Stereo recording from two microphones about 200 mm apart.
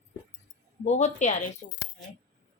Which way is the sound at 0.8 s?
35° left (ahead or behind).